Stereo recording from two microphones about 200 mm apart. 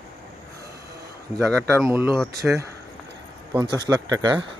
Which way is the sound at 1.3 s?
5° left (ahead or behind).